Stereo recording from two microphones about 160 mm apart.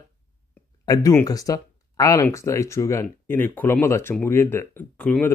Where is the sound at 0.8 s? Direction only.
20° left (ahead or behind).